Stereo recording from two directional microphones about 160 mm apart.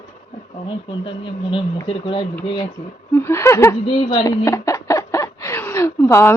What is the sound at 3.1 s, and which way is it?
Chuckle, 15° left (ahead or behind).